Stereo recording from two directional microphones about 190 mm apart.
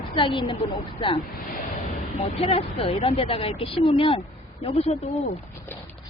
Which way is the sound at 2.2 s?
30° left (ahead or behind).